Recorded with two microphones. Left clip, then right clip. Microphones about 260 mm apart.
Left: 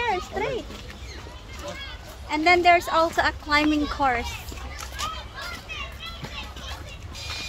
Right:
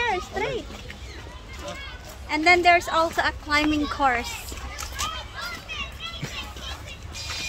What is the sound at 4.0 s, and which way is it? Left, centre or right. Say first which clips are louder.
Speech: right 2 dB; centre.